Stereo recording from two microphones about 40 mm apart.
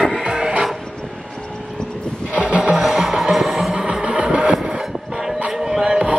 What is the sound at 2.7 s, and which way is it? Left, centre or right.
Music, centre.